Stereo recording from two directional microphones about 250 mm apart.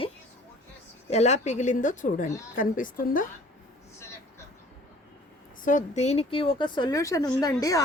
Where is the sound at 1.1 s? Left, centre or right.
Left.